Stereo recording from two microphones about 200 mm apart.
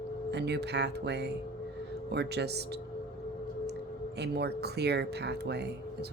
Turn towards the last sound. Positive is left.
turn(degrees=-55)  # may be behind; listen again after turning